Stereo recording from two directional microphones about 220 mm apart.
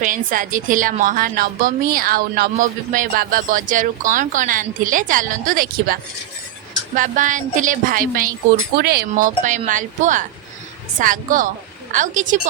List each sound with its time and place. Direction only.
0.0 s a woman's voice: 40° right (ahead or behind)